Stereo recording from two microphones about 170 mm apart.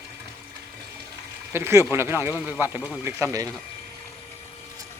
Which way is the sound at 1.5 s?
15° right (ahead or behind).